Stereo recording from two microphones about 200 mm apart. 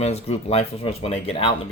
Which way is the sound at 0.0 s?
30° left (ahead or behind).